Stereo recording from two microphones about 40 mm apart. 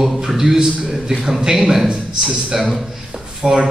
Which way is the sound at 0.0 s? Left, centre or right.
Centre.